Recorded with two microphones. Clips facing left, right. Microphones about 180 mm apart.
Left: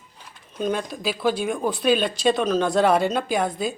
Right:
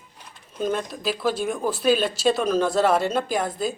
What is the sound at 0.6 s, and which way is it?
Speech, centre (ahead or behind).